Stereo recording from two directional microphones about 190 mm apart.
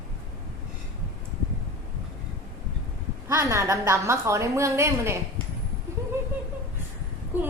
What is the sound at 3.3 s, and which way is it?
A woman's voice, 15° right (ahead or behind).